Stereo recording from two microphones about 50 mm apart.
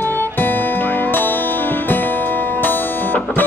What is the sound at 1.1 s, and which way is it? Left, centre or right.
Music, left.